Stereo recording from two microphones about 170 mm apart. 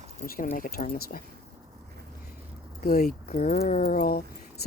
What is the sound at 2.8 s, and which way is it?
Speech, 60° left (ahead or behind).